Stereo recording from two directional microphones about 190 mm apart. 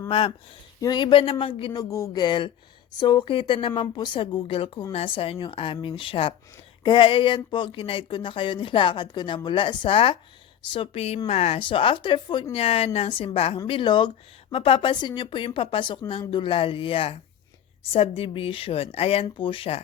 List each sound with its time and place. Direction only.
0.1 s a woman's voice: 30° left (ahead or behind)